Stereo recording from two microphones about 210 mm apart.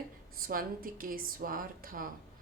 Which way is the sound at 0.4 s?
40° right (ahead or behind).